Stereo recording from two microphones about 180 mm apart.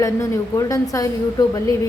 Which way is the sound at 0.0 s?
15° left (ahead or behind).